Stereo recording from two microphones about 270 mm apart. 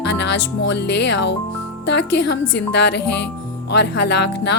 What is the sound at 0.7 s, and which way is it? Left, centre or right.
A woman's voice, left.